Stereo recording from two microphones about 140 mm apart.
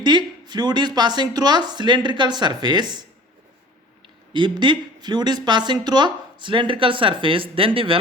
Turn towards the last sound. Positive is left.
turn(degrees=-40)  # may be behind; listen again after turning